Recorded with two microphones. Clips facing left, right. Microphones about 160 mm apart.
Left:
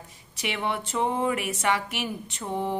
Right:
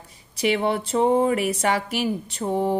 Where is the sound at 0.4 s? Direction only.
35° right (ahead or behind).